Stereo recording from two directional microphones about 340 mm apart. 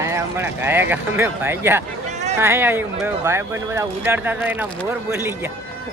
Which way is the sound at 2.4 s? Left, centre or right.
Centre.